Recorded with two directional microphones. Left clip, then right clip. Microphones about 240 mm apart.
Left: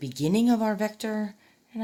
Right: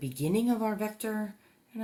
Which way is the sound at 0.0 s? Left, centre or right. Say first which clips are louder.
Left 5 dB; left.